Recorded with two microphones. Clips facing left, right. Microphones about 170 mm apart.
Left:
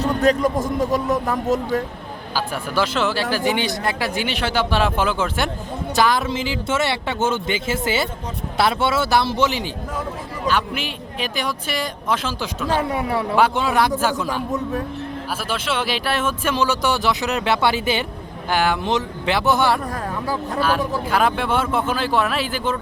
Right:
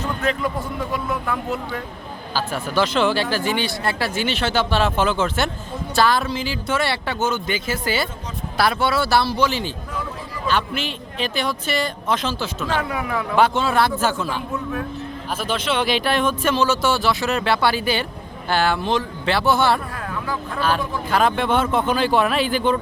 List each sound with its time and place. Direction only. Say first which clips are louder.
0.0 s speech: left 6 dB; 40° left (ahead or behind)
2.3 s speech: right 1 dB; 10° left (ahead or behind)
3.4 s speech: left 2 dB; 15° left (ahead or behind)
12.9 s speech: left 3 dB; 30° left (ahead or behind)
13.3 s speech: right 1 dB; 10° left (ahead or behind)
20.2 s speech: left 3 dB; 35° left (ahead or behind)
20.6 s speech: left 1 dB; 10° left (ahead or behind)